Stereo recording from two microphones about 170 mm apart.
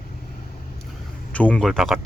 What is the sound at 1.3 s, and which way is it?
Speech, 5° left (ahead or behind).